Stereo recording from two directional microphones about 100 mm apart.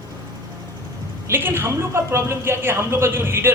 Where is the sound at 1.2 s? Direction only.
25° right (ahead or behind).